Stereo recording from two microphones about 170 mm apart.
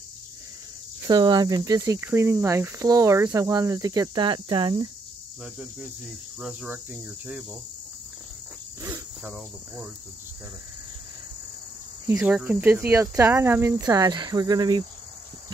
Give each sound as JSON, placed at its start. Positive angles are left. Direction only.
{"t": 1.0, "sound": "speech", "side_deg": -25}
{"t": 5.4, "sound": "speech", "side_deg": -10}
{"t": 8.8, "sound": "cricket", "side_deg": -15}
{"t": 12.1, "sound": "speech", "side_deg": -10}